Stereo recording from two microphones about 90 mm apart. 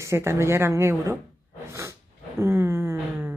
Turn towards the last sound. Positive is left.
turn(degrees=-30)  # may be behind; listen again after turning